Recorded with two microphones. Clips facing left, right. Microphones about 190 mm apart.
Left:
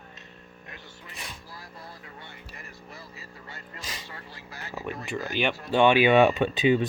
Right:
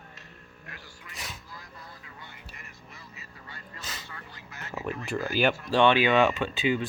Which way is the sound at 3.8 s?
10° left (ahead or behind).